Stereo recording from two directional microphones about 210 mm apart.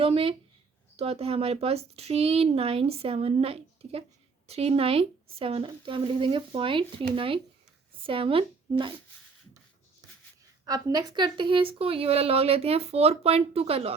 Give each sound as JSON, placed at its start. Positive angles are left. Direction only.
{"t": 0.0, "sound": "speech", "side_deg": -25}
{"t": 8.0, "sound": "speech", "side_deg": -25}
{"t": 10.7, "sound": "speech", "side_deg": -20}